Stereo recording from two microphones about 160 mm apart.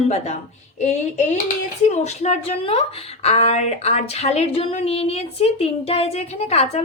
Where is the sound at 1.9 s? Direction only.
45° left (ahead or behind).